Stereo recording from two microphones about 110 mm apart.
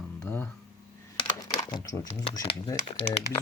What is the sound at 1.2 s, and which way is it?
Typing, 45° left (ahead or behind).